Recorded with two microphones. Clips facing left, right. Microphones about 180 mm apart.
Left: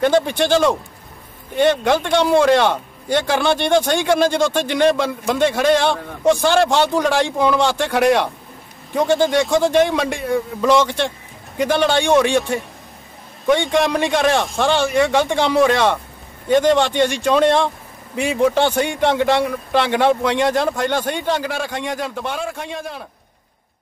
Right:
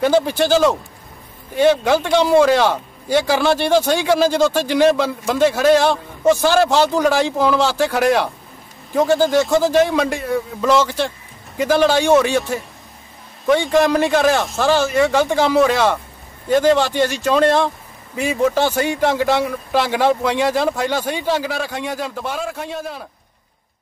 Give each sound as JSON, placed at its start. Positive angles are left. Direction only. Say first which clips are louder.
{"t": 0.0, "sound": "speech", "louder": "even", "side_deg": -5}